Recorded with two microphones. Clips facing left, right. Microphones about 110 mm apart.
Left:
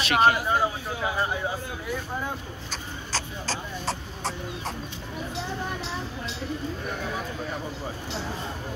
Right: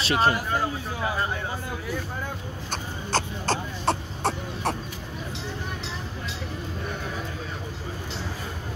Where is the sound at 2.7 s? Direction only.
55° right (ahead or behind).